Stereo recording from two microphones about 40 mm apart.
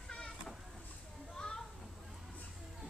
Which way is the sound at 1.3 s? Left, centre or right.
Centre.